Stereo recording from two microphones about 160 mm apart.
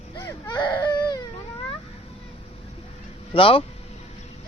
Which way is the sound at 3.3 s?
35° left (ahead or behind).